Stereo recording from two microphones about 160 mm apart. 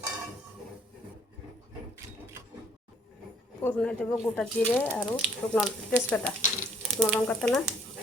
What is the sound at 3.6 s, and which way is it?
Speech, 10° left (ahead or behind).